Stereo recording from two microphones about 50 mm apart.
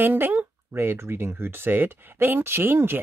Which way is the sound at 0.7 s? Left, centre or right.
Right.